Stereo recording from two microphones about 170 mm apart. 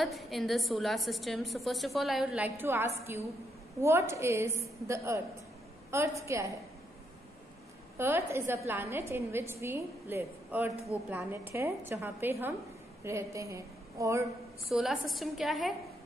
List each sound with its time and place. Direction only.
0.0 s a woman's voice: centre (ahead or behind); by 6.5 s 15° right (ahead or behind)
8.0 s a woman's voice: 15° right (ahead or behind)
14.7 s a woman's voice: centre (ahead or behind)